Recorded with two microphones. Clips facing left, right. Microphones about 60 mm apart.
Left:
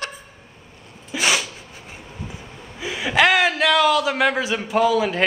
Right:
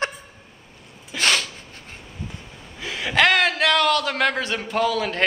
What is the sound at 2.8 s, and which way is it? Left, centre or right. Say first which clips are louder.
A man's voice: left 2 dB; centre.